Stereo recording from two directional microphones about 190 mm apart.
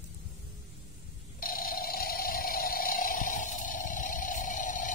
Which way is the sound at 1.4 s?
50° left (ahead or behind).